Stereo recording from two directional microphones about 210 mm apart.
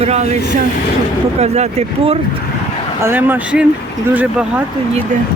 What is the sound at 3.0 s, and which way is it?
Speech, 10° right (ahead or behind).